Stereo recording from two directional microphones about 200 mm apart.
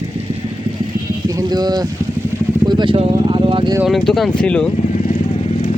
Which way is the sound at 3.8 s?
Centre (ahead or behind).